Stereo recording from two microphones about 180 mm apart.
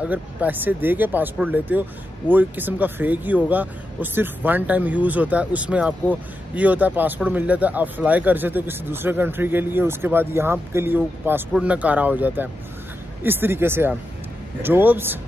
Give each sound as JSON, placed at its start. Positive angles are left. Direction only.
{"t": 0.0, "sound": "speech", "side_deg": -10}